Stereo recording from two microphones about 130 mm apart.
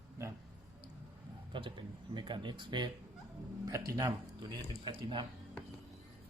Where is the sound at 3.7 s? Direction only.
25° right (ahead or behind).